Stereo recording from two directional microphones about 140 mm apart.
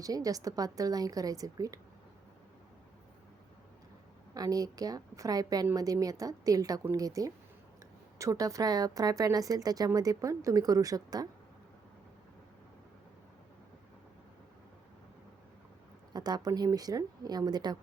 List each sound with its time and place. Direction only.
0.0 s speech: 25° right (ahead or behind)
4.4 s speech: 25° right (ahead or behind)
16.1 s speech: 30° right (ahead or behind)